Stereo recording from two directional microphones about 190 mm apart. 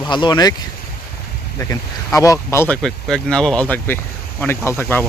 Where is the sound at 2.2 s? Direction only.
15° left (ahead or behind).